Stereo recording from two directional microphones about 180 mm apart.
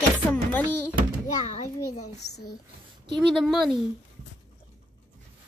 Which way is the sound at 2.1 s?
40° left (ahead or behind).